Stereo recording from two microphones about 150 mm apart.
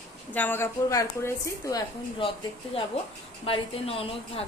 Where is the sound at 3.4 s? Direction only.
40° left (ahead or behind).